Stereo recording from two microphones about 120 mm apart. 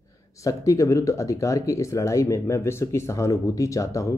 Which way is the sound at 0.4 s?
25° left (ahead or behind).